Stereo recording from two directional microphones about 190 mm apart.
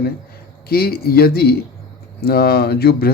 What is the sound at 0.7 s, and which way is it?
Speech, 55° left (ahead or behind).